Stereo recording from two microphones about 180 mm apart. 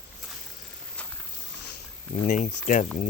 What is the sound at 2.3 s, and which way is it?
Speech, 45° left (ahead or behind).